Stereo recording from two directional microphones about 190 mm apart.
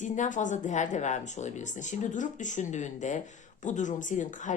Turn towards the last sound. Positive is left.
turn(degrees=40)  # may be behind; listen again after turning